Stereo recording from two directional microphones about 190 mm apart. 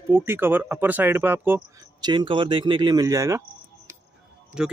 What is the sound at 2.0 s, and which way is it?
Speech, 25° right (ahead or behind).